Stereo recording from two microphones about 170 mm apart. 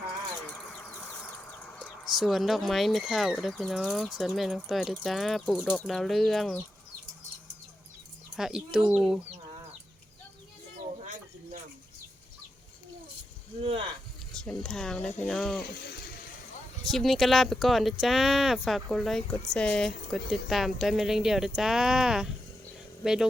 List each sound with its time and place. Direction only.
0.5 s vehicle: 5° left (ahead or behind)
1.8 s speech: centre (ahead or behind)
8.4 s speech: 5° right (ahead or behind)
13.6 s speech: 35° right (ahead or behind)
14.6 s speech: 5° left (ahead or behind)
16.8 s speech: centre (ahead or behind)